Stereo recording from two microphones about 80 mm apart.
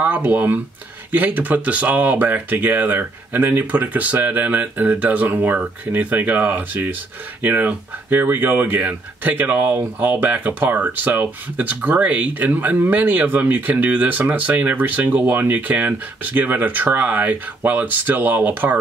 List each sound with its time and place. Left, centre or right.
0.0 s speech: right